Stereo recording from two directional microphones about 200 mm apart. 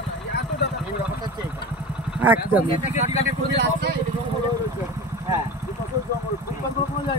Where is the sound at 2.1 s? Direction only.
10° right (ahead or behind).